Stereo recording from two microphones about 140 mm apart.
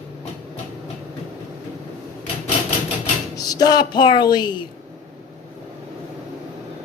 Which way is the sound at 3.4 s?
30° left (ahead or behind).